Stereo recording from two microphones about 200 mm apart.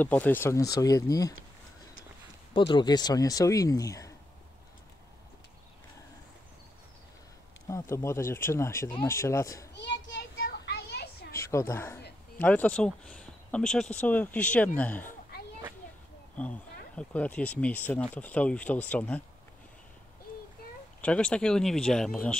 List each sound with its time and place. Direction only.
0.0 s speech: 10° left (ahead or behind)
2.5 s speech: 25° left (ahead or behind)
7.6 s speech: 15° left (ahead or behind)
9.8 s a sound: 60° left (ahead or behind)
11.3 s a woman's voice: 15° left (ahead or behind)
16.3 s speech: 5° left (ahead or behind)
21.0 s speech: 5° left (ahead or behind)